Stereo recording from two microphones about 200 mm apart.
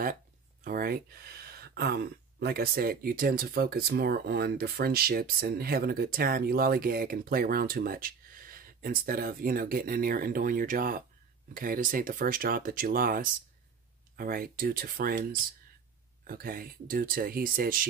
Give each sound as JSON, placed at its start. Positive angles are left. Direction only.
{"t": 0.7, "sound": "speech", "side_deg": -50}
{"t": 16.3, "sound": "speech", "side_deg": -45}